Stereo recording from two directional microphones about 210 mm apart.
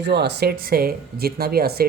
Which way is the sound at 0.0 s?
55° right (ahead or behind).